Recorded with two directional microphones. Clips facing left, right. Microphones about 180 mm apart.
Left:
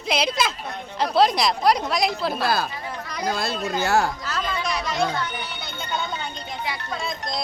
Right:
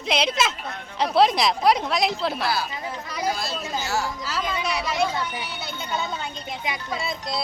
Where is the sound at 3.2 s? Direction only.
60° left (ahead or behind).